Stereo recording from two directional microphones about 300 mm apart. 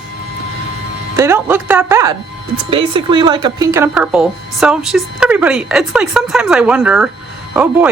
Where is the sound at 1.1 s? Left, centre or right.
Centre.